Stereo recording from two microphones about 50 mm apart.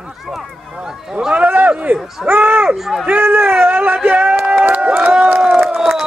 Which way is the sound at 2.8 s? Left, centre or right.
Centre.